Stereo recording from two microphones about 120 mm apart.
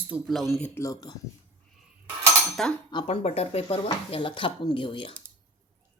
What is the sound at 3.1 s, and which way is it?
Speech, 60° left (ahead or behind).